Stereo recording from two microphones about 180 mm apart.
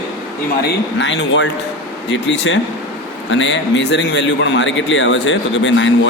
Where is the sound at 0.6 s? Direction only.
80° left.